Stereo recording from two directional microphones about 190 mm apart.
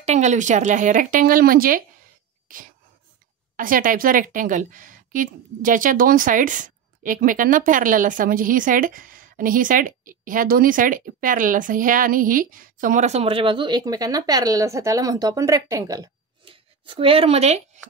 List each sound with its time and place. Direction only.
0.0 s a woman's voice: 35° right (ahead or behind)
2.4 s throat clearing: 45° right (ahead or behind)
3.5 s a woman's voice: 45° right (ahead or behind)